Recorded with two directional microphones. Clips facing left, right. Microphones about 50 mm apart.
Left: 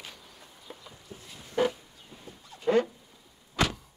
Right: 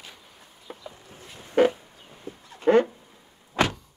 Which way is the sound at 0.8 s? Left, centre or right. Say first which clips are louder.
Right 4 dB; right.